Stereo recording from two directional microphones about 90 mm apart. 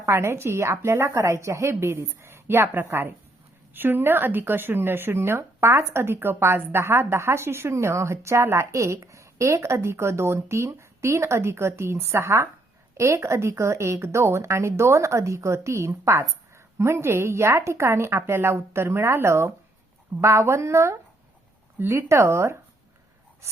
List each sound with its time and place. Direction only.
0.0 s a woman's voice: 30° right (ahead or behind)